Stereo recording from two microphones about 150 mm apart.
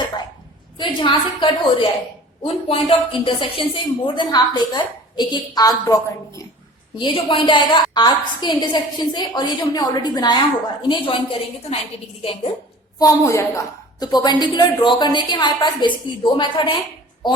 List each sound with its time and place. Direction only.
0.8 s a woman's voice: 30° left (ahead or behind)
6.9 s a woman's voice: 35° left (ahead or behind)
13.0 s a woman's voice: 20° left (ahead or behind)